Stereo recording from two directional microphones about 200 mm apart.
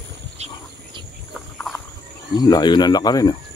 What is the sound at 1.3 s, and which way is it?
Cricket, centre (ahead or behind).